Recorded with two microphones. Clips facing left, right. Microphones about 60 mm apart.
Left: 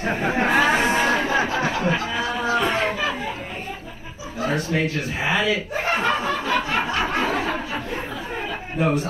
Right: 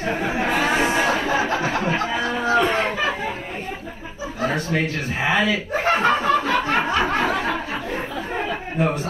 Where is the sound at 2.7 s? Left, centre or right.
Right.